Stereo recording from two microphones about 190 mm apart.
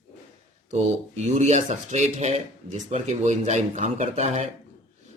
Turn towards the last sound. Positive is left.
turn(degrees=-35)  # may be behind; listen again after turning